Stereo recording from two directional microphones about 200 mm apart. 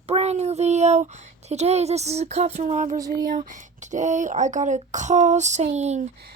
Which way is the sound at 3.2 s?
45° right (ahead or behind).